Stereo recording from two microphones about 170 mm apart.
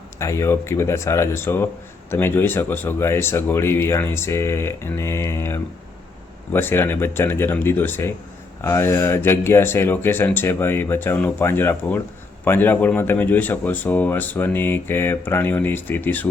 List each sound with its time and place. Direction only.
0.2 s speech: 15° left (ahead or behind)